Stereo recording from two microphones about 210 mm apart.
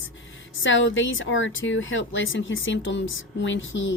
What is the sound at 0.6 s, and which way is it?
Speech, 65° left (ahead or behind).